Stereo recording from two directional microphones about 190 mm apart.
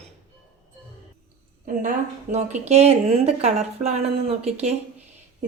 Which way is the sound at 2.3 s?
35° right (ahead or behind).